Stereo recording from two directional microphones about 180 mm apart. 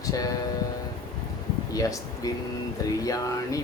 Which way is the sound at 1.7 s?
20° left (ahead or behind).